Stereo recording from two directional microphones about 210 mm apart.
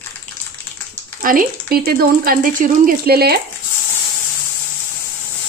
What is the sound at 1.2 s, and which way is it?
Speech, 40° right (ahead or behind).